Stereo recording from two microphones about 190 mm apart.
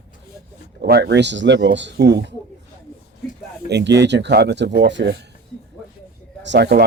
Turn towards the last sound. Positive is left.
turn(degrees=-60)  # may be behind; listen again after turning